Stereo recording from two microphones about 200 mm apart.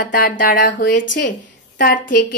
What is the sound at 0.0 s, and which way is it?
Speech, 45° left (ahead or behind).